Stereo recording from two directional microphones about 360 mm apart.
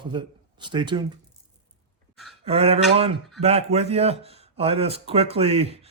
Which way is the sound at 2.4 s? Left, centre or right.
Centre.